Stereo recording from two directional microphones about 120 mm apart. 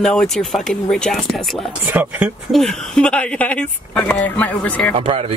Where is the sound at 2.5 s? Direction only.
5° left (ahead or behind).